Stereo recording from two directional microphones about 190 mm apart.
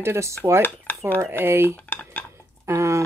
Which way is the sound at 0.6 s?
10° left (ahead or behind).